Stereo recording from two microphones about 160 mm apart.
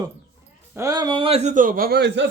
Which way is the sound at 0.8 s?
25° right (ahead or behind).